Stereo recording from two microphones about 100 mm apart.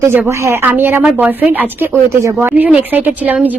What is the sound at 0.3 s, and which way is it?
A woman's voice, 25° right (ahead or behind).